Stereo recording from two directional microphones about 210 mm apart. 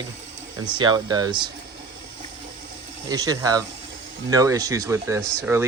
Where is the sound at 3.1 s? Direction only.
15° right (ahead or behind).